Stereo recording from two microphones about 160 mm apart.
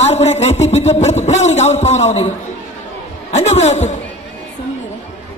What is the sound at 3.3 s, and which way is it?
Speech, 45° left (ahead or behind).